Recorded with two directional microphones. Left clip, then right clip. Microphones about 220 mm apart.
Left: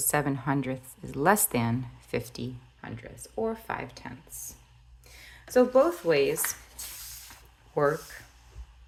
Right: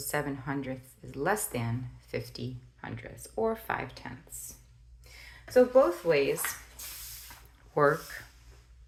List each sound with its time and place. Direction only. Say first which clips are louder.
0.0 s speech: left 5 dB; 35° left (ahead or behind)
2.8 s speech: even; 15° left (ahead or behind)
5.5 s speech: even; 40° left (ahead or behind)
7.7 s speech: right 1 dB; 10° left (ahead or behind)